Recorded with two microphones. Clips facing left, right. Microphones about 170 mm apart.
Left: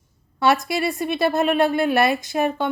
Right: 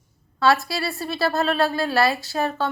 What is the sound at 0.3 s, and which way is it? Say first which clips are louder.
A woman's voice: left 1 dB; 20° left (ahead or behind).